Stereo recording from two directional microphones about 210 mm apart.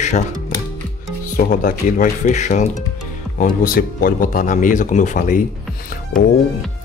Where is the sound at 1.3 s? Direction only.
40° left (ahead or behind).